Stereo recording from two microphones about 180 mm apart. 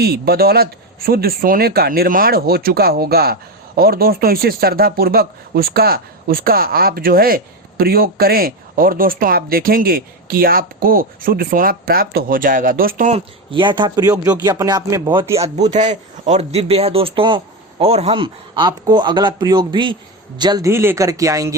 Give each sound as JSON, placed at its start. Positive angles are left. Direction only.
{"t": 0.0, "sound": "speech", "side_deg": -60}
{"t": 13.1, "sound": "speech", "side_deg": -30}
{"t": 15.4, "sound": "a man's voice", "side_deg": -40}